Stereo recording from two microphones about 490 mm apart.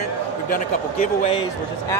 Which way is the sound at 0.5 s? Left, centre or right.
Centre.